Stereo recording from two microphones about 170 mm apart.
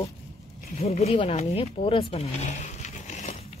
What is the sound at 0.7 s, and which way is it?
Speech, 40° left (ahead or behind).